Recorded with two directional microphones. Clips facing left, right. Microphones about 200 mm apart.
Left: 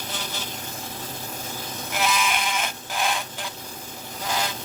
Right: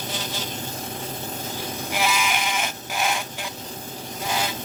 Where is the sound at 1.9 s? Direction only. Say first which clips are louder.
Even; 10° right (ahead or behind).